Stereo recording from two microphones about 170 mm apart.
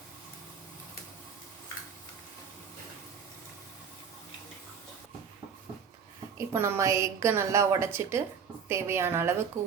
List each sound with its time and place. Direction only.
6.3 s a woman's voice: 15° right (ahead or behind)
9.6 s speech: 45° right (ahead or behind)